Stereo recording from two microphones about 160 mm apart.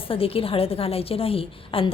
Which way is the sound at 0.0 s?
35° left (ahead or behind).